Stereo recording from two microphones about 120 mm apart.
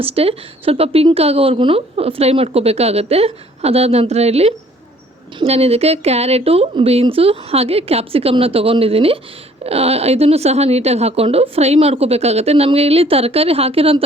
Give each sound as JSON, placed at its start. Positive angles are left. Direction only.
{"t": 0.0, "sound": "a woman's voice", "side_deg": -55}